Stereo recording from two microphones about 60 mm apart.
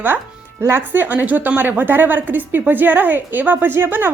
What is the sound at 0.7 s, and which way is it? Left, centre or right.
A woman's voice, right.